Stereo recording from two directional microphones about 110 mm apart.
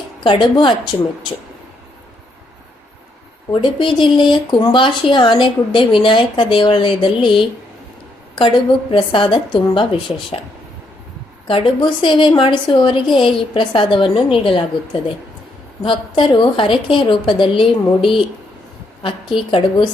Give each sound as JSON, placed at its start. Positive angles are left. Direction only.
{"t": 0.2, "sound": "a woman's voice", "side_deg": 45}
{"t": 3.5, "sound": "a woman's voice", "side_deg": 50}
{"t": 11.4, "sound": "a woman's voice", "side_deg": 50}
{"t": 15.8, "sound": "a woman's voice", "side_deg": 50}